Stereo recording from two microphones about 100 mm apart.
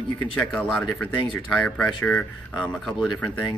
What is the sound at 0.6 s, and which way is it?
Speech, 10° left (ahead or behind).